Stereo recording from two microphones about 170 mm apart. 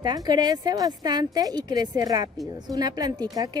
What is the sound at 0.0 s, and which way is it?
Speech, 25° right (ahead or behind).